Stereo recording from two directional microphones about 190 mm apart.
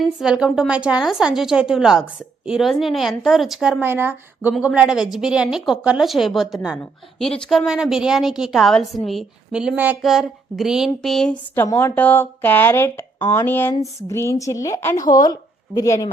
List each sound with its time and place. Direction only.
0.2 s a woman's voice: 5° right (ahead or behind); by 16.0 s 20° left (ahead or behind)